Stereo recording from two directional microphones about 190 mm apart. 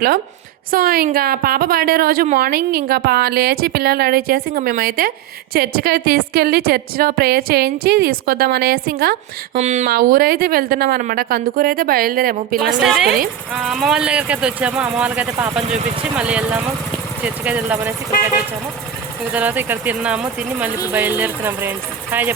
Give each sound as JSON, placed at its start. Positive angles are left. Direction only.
{"t": 0.7, "sound": "a woman's voice", "side_deg": -50}
{"t": 9.6, "sound": "speech", "side_deg": -35}
{"t": 9.9, "sound": "a woman's voice", "side_deg": -50}
{"t": 12.5, "sound": "a woman's voice", "side_deg": -5}
{"t": 19.3, "sound": "speech", "side_deg": -10}